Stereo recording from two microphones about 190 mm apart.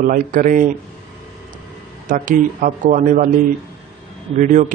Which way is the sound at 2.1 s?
45° right (ahead or behind).